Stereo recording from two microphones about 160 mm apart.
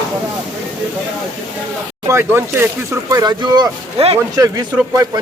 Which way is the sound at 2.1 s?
15° right (ahead or behind).